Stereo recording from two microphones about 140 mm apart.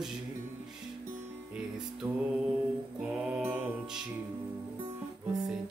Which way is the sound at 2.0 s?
20° right (ahead or behind).